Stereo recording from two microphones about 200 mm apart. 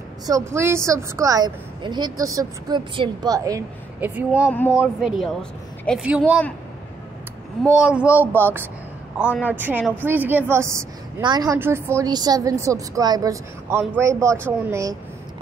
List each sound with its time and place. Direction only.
0.3 s a woman's voice: 15° right (ahead or behind)
4.5 s speech: 10° left (ahead or behind)
5.0 s a woman's voice: centre (ahead or behind)
7.8 s a woman's voice: 5° right (ahead or behind)
9.2 s speech: 10° left (ahead or behind)
9.5 s a woman's voice: 10° right (ahead or behind)